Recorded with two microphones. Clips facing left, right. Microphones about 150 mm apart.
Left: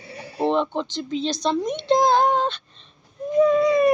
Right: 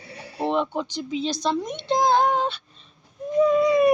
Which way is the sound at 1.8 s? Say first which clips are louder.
Left 2 dB; centre (ahead or behind).